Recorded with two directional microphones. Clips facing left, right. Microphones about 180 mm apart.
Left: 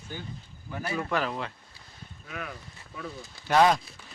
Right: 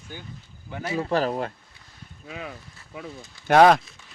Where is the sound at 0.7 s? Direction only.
30° right (ahead or behind).